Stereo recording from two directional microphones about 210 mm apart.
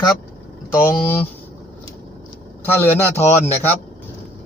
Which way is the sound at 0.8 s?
10° left (ahead or behind).